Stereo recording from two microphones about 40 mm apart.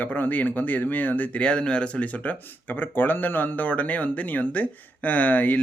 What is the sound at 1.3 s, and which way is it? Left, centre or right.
Speech, left.